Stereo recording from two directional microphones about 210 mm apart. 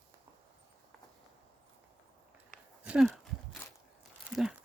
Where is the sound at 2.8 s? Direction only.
5° right (ahead or behind).